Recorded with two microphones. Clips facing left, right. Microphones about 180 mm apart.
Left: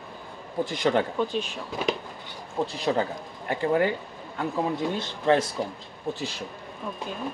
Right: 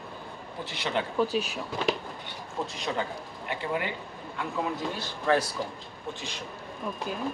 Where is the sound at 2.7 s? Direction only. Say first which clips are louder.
Left 7 dB; 35° left (ahead or behind).